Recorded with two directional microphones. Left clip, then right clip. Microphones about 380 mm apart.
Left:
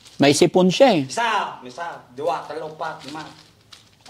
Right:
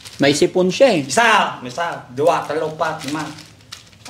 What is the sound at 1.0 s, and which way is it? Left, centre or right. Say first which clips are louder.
Speech: right 8 dB; right.